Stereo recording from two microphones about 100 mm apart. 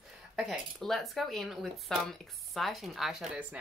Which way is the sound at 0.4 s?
Centre (ahead or behind).